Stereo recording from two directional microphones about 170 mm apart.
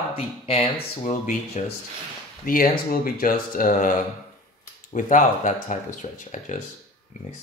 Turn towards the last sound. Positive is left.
turn(degrees=45)  # may be behind; listen again after turning